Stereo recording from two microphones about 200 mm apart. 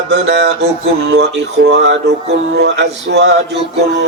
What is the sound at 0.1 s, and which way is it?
Speech, 60° right (ahead or behind).